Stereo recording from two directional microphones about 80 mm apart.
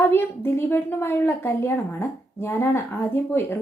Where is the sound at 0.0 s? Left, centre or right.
Left.